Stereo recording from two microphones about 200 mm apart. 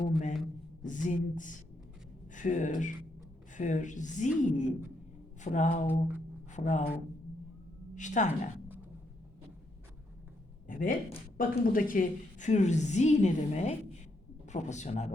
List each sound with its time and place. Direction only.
0.0 s a sound: 35° left (ahead or behind)
0.8 s a woman's voice: 40° left (ahead or behind)
7.9 s a woman's voice: 40° left (ahead or behind)
10.7 s a woman's voice: 40° left (ahead or behind)